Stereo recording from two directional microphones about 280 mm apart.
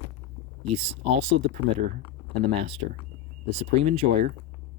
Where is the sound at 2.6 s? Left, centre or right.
Right.